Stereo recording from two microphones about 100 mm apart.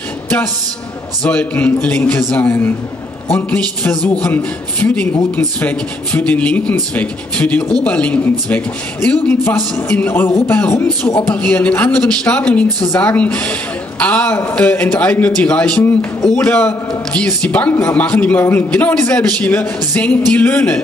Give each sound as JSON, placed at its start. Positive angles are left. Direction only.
{"t": 1.2, "sound": "a man's voice", "side_deg": 15}